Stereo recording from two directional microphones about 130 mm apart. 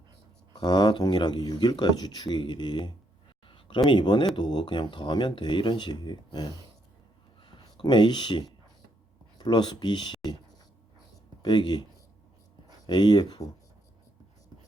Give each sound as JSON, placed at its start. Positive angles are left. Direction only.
{"t": 0.5, "sound": "speech", "side_deg": 35}
{"t": 3.4, "sound": "a sound", "side_deg": 40}
{"t": 3.8, "sound": "speech", "side_deg": 35}
{"t": 7.4, "sound": "a sound", "side_deg": 40}
{"t": 9.4, "sound": "speech", "side_deg": 35}
{"t": 11.4, "sound": "speech", "side_deg": 35}
{"t": 12.9, "sound": "speech", "side_deg": 35}